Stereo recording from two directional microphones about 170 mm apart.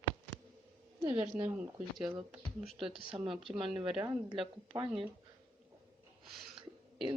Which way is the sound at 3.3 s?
Centre (ahead or behind).